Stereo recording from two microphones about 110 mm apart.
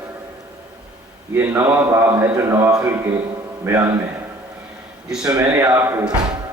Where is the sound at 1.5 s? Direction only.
25° right (ahead or behind).